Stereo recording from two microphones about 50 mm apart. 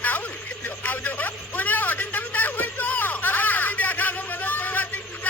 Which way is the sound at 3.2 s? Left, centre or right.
Left.